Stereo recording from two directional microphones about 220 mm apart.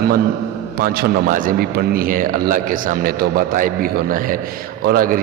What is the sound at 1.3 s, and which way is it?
A man's voice, 40° right (ahead or behind).